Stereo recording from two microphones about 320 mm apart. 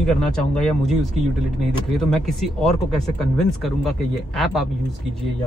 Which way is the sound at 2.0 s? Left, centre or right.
Centre.